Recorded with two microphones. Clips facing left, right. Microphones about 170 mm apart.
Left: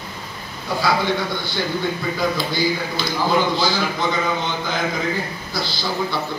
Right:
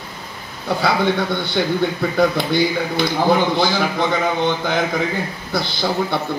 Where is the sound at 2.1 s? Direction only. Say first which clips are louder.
Right 9 dB; 60° right (ahead or behind).